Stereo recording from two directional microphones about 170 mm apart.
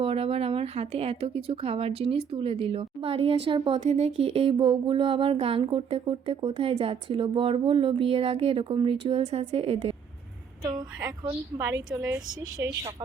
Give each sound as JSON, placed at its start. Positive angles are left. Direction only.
{"t": 0.0, "sound": "a woman's voice", "side_deg": -35}